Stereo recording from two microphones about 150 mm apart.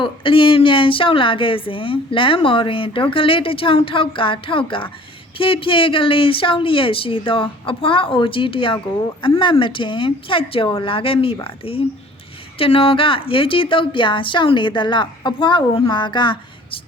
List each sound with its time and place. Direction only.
0.0 s a woman's voice: 35° left (ahead or behind)